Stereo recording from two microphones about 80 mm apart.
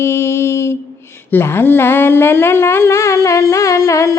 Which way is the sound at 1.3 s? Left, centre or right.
Left.